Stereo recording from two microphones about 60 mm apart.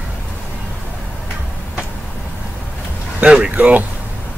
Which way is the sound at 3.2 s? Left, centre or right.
Centre.